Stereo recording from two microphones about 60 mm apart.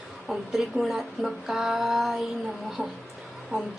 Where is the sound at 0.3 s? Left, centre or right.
Centre.